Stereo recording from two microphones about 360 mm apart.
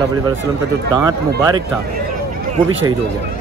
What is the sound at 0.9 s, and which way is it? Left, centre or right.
Speech, centre.